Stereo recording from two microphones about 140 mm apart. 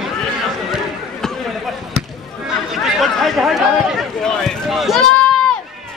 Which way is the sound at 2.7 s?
Centre (ahead or behind).